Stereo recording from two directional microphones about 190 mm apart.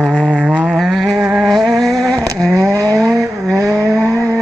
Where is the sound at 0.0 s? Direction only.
5° right (ahead or behind).